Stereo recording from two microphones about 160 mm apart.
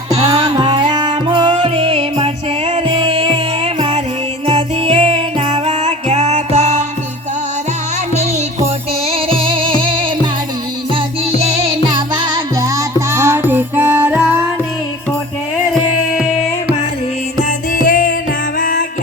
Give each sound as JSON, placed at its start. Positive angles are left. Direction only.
{"t": 0.3, "sound": "music", "side_deg": -25}
{"t": 8.2, "sound": "music", "side_deg": -40}
{"t": 11.4, "sound": "music", "side_deg": -40}
{"t": 17.7, "sound": "music", "side_deg": 60}